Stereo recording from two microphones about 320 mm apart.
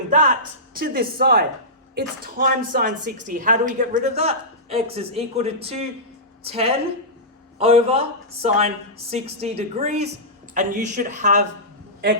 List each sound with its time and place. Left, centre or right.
0.1 s a woman's voice: right